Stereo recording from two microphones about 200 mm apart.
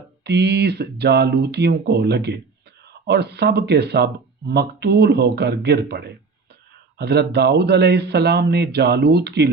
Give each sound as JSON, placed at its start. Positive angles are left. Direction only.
{"t": 0.3, "sound": "speech", "side_deg": -55}